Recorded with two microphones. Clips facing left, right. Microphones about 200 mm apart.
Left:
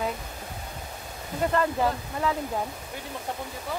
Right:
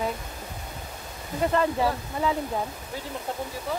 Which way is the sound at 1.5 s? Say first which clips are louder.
Right 1 dB; 5° right (ahead or behind).